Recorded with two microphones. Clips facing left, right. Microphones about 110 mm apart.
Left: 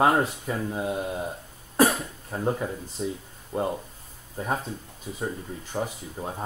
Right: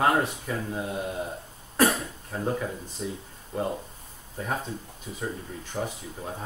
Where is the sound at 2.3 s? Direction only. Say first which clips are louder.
Left 2 dB; 15° left (ahead or behind).